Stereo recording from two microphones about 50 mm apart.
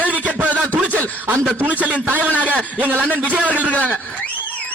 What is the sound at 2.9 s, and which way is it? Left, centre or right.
Speech, left.